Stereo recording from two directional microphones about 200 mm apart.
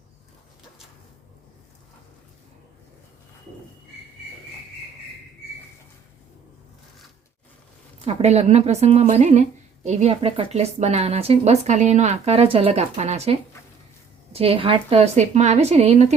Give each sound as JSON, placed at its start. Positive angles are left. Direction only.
{"t": 8.0, "sound": "a woman's voice", "side_deg": -30}
{"t": 14.3, "sound": "a woman's voice", "side_deg": -30}